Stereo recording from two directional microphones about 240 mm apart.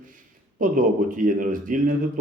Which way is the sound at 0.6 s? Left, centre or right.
Right.